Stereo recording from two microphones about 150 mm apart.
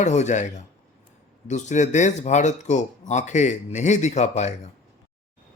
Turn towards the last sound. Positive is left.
turn(degrees=50)  # may be behind; listen again after turning